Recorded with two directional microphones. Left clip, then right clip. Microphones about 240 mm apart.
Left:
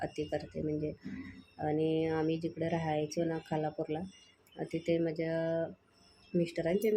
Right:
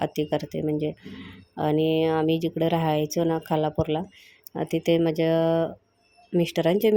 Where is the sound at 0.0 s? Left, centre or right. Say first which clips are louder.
Right 10 dB; right.